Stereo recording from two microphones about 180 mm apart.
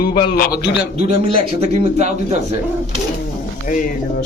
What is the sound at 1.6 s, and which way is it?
Speech, 40° right (ahead or behind).